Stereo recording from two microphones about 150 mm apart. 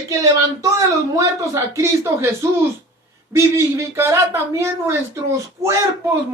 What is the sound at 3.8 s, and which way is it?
Speech, 20° right (ahead or behind).